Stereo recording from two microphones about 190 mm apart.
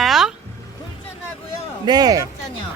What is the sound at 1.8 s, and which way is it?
Speech, 20° right (ahead or behind).